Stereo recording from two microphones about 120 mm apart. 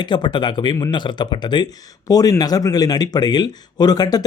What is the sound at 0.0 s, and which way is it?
Speech, 40° left (ahead or behind).